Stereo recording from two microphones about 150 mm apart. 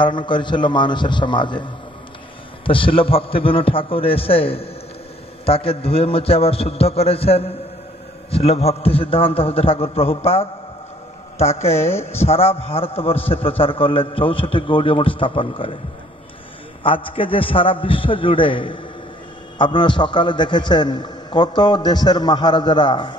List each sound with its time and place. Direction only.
0.0 s a man's voice: 30° left (ahead or behind)
11.7 s speech: 15° left (ahead or behind)
12.2 s a man's voice: 40° left (ahead or behind)
16.8 s a man's voice: 35° left (ahead or behind)